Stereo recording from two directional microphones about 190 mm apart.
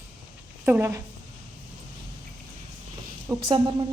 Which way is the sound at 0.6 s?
10° right (ahead or behind).